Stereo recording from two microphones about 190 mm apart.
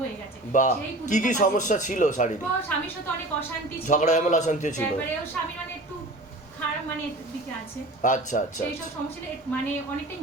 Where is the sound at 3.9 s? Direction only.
40° left (ahead or behind).